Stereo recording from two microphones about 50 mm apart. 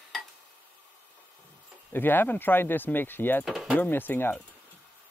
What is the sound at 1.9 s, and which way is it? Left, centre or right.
Speech, left.